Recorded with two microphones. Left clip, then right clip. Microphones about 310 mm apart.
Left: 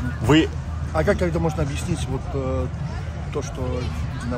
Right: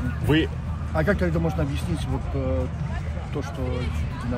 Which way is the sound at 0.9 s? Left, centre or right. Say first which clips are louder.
Left 3 dB; left.